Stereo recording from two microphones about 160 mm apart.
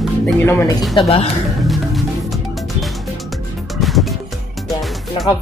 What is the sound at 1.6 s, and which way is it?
Music, centre (ahead or behind).